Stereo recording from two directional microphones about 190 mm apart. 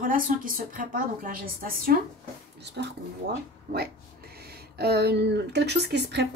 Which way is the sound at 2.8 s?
65° right (ahead or behind).